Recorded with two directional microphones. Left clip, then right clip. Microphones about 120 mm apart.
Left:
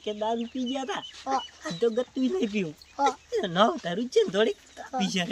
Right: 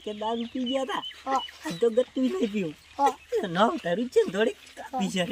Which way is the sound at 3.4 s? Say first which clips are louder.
Left 2 dB; 50° left (ahead or behind).